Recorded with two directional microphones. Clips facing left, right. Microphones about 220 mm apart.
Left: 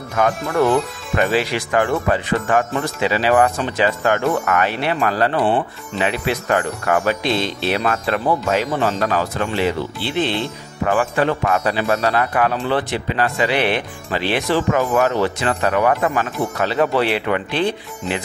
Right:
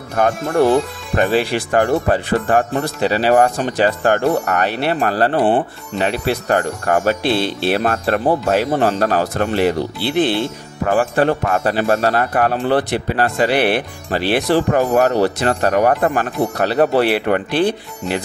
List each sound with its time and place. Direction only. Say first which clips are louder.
0.1 s speech: right 2 dB; 40° right (ahead or behind)
7.2 s speech: right 3 dB; 5° right (ahead or behind)
7.7 s speech: right 2 dB; 50° right (ahead or behind)
11.0 s speech: right 4 dB; 40° right (ahead or behind)
17.5 s speech: right 3 dB; 5° right (ahead or behind)